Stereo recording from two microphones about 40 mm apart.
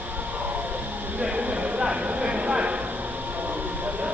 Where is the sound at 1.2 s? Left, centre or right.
Right.